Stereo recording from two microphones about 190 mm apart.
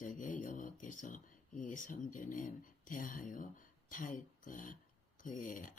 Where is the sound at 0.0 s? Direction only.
45° left (ahead or behind).